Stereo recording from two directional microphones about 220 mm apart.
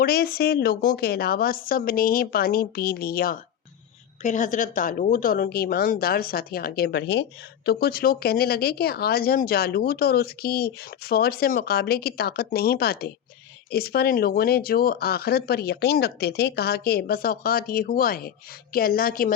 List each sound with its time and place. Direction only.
0.0 s a woman's voice: 45° left (ahead or behind)